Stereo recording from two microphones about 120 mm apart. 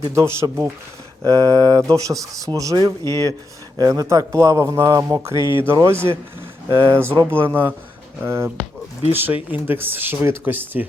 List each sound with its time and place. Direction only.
0.1 s speech: 25° right (ahead or behind)
1.2 s speech: 30° right (ahead or behind); by 10.8 s 15° right (ahead or behind)